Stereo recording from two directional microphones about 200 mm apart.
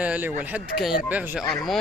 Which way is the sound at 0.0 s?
5° right (ahead or behind).